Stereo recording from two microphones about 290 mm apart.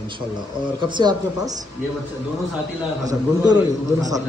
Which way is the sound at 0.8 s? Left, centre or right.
Centre.